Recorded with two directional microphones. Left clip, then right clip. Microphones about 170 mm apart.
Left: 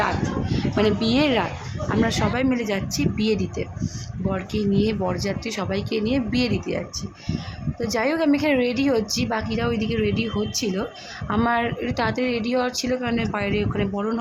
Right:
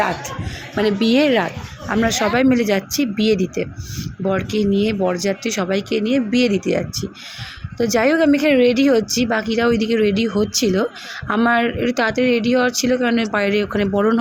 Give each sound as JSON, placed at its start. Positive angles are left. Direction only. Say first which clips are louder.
{"t": 0.9, "sound": "speech", "louder": "right 5 dB", "side_deg": -15}